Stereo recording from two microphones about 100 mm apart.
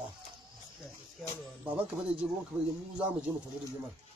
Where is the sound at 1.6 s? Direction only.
10° right (ahead or behind).